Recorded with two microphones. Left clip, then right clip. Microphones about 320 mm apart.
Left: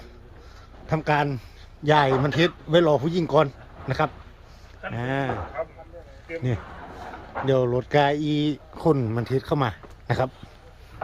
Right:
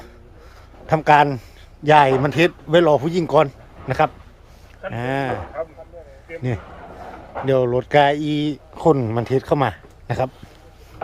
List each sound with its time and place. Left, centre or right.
0.9 s speech: centre
6.7 s a sound: right
7.4 s speech: centre